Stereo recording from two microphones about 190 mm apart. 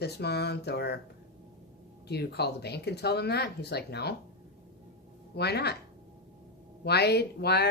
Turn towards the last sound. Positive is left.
turn(degrees=60)  # may be behind; listen again after turning